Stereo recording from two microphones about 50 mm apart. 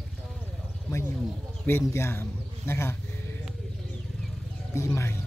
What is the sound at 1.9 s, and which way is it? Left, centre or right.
Speech, left.